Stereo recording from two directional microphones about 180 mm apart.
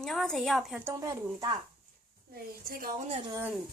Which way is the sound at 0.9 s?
20° right (ahead or behind).